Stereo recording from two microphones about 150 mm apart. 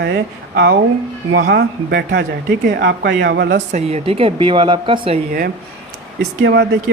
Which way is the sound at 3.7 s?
45° right (ahead or behind).